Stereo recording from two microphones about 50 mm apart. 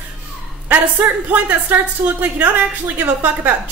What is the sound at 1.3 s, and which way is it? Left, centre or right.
Speech, right.